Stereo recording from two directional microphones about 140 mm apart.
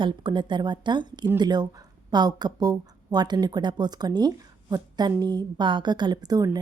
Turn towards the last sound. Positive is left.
turn(degrees=-30)  # may be behind; listen again after turning